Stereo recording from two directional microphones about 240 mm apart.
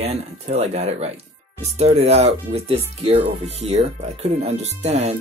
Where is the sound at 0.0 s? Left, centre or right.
Right.